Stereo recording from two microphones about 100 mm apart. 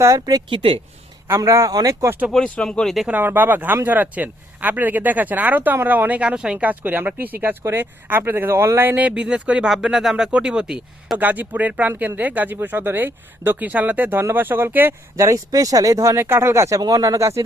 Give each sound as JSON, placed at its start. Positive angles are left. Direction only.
{"t": 0.2, "sound": "speech", "side_deg": -45}
{"t": 1.3, "sound": "speech", "side_deg": -30}
{"t": 2.3, "sound": "speech", "side_deg": 10}
{"t": 3.1, "sound": "speech", "side_deg": -20}
{"t": 15.1, "sound": "speech", "side_deg": -35}